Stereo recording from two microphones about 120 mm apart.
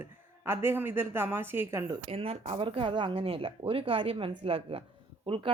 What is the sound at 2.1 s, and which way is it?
A woman's voice, 55° right (ahead or behind).